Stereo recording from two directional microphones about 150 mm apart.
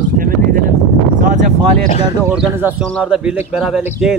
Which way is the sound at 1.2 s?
60° right (ahead or behind).